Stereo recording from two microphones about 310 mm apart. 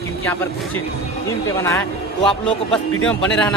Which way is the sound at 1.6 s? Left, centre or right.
Centre.